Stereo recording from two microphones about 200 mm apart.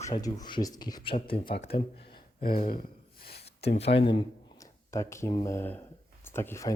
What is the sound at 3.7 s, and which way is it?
Speech, 30° left (ahead or behind).